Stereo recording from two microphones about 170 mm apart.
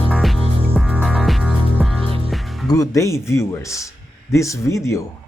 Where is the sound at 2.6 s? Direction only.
20° left (ahead or behind).